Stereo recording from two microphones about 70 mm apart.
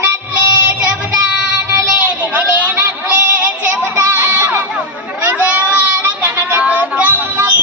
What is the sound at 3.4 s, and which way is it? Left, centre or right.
Child singing, right.